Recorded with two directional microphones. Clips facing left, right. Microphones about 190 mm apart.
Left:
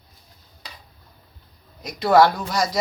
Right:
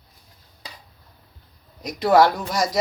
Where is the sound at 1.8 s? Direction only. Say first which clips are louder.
Even; 40° right (ahead or behind).